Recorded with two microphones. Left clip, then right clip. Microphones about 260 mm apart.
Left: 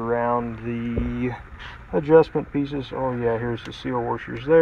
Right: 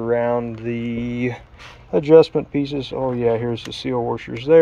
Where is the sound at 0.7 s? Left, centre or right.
Right.